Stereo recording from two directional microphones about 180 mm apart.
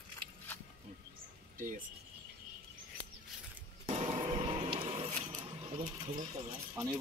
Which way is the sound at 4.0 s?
30° right (ahead or behind).